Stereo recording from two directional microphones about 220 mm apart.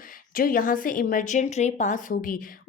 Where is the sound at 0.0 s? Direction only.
40° left (ahead or behind).